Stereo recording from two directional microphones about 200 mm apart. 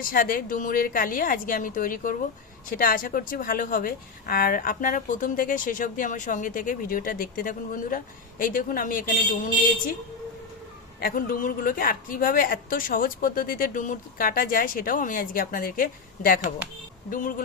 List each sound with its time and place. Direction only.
0.0 s a woman's voice: 45° left (ahead or behind)
11.0 s a woman's voice: 45° left (ahead or behind)